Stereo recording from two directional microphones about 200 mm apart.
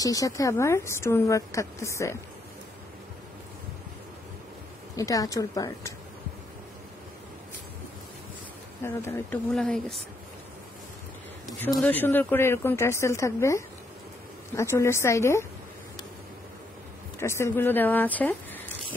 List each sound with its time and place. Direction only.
0.0 s speech: 15° left (ahead or behind)
4.9 s speech: 15° left (ahead or behind)
8.8 s speech: 10° left (ahead or behind)
11.4 s speech: 5° left (ahead or behind)
17.2 s speech: 15° left (ahead or behind)